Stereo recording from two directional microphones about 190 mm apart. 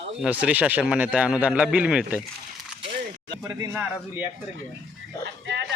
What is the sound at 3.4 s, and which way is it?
Speech, 15° right (ahead or behind).